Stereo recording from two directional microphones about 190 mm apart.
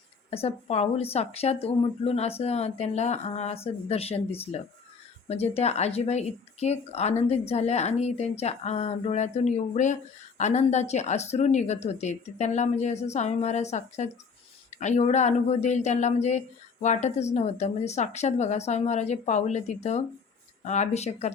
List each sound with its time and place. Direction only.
0.3 s speech: 35° left (ahead or behind)